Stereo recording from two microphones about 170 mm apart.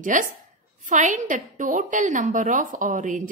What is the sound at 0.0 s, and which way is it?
A woman's voice, 50° right (ahead or behind).